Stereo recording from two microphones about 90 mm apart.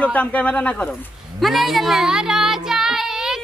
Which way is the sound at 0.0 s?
15° left (ahead or behind).